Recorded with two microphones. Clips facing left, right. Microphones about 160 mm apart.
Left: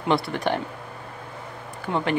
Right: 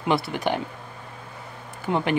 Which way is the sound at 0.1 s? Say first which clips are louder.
Left 1 dB; centre (ahead or behind).